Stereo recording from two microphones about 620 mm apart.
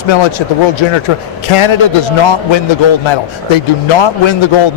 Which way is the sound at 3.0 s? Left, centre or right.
Left.